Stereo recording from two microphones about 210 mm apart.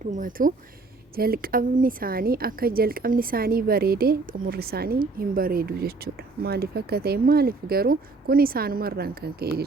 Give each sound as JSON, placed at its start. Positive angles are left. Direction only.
{"t": 0.2, "sound": "speech", "side_deg": -40}